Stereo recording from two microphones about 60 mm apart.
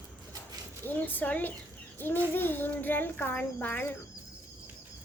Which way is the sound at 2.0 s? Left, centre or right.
Left.